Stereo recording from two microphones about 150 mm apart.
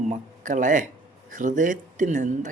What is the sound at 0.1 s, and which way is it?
Speech, 55° right (ahead or behind).